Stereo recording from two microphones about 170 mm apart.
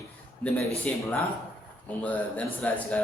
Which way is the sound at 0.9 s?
10° left (ahead or behind).